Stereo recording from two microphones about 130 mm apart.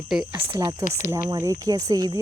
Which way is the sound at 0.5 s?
25° right (ahead or behind).